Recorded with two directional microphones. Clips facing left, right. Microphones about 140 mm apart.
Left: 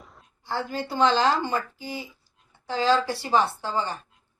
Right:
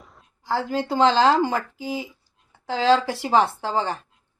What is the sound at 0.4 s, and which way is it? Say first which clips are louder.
A woman's voice: right 5 dB; 90° right.